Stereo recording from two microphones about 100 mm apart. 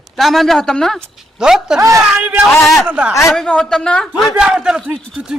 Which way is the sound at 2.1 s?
10° right (ahead or behind).